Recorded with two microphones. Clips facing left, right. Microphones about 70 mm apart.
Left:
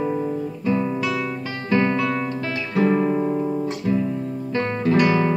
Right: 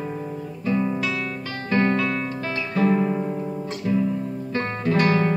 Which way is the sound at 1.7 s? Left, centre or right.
Centre.